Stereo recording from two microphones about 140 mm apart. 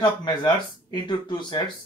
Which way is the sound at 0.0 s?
30° left (ahead or behind).